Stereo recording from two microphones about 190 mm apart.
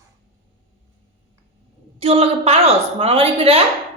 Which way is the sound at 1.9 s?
30° right (ahead or behind).